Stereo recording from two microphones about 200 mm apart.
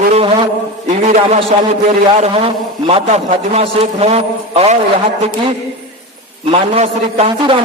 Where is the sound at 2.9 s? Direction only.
30° right (ahead or behind).